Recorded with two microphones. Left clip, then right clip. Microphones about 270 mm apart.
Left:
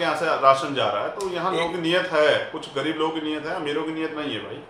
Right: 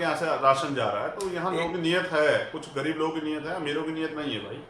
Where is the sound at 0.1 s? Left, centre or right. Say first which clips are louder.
Left 5 dB; centre.